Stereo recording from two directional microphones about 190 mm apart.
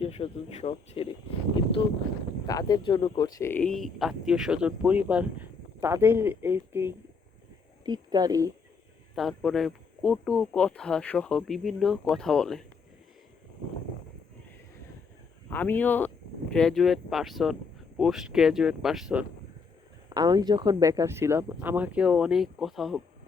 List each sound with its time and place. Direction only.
0.0 s speech: 30° left (ahead or behind); by 8.4 s 20° right (ahead or behind)
9.1 s speech: centre (ahead or behind)
15.4 s speech: 10° left (ahead or behind)
20.1 s speech: 20° right (ahead or behind); by 23.0 s centre (ahead or behind)